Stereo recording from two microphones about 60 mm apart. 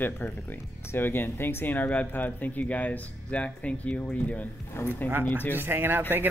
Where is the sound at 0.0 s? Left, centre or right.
Left.